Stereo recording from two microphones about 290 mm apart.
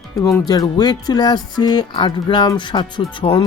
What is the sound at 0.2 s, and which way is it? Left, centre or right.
Speech, centre.